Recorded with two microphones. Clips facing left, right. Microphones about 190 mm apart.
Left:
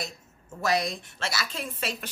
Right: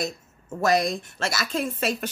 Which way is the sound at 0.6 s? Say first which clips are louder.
Right 5 dB; 45° right (ahead or behind).